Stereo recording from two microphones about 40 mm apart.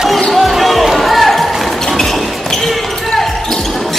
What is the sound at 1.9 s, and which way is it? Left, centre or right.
Basketball bounce, centre.